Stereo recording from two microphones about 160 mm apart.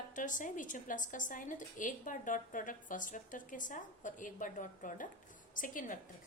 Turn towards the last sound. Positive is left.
turn(degrees=55)  # may be behind; listen again after turning